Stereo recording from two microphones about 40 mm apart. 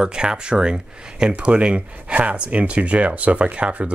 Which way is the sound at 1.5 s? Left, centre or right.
Right.